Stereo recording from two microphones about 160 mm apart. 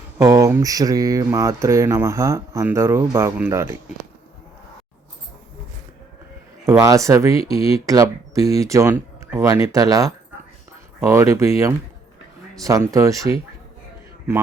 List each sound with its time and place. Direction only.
0.2 s speech: 20° right (ahead or behind)
6.7 s speech: 20° right (ahead or behind)
12.6 s speech: 20° right (ahead or behind)